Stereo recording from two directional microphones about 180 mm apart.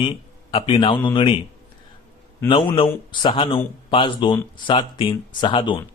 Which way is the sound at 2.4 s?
25° left (ahead or behind).